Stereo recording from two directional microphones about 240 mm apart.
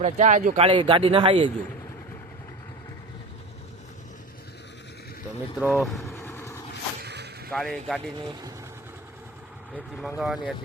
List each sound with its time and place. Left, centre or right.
0.0 s speech: right
5.5 s speech: centre
6.1 s vehicle: centre
7.0 s a sound: right
7.5 s speech: centre
9.7 s speech: centre